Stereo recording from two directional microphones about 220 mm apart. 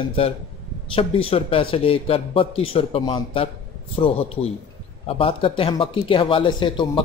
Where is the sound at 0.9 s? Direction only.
25° left (ahead or behind).